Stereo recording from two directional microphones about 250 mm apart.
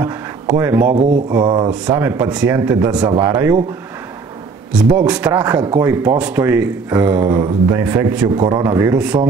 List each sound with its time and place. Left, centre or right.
0.0 s a sound: centre
0.9 s mantra: right
1.3 s speech: centre
1.7 s speech: centre
4.7 s speech: centre
5.6 s mantra: centre
5.9 s speech: centre